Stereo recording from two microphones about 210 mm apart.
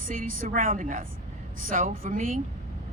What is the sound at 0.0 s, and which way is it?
Speech, 40° right (ahead or behind).